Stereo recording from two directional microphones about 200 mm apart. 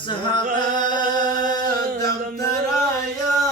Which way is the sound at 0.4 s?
40° right (ahead or behind).